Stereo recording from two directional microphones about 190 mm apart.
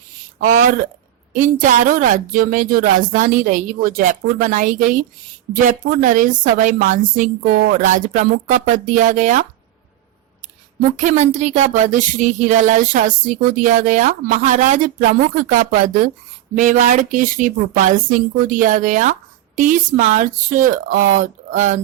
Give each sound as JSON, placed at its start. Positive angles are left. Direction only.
{"t": 0.3, "sound": "a woman's voice", "side_deg": -45}
{"t": 10.9, "sound": "a woman's voice", "side_deg": -40}